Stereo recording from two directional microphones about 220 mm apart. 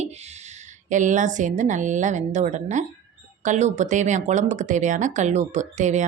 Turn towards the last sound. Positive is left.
turn(degrees=-35)  # may be behind; listen again after turning